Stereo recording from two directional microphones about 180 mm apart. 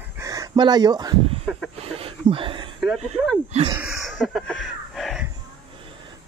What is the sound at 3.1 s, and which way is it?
Speech, 5° left (ahead or behind).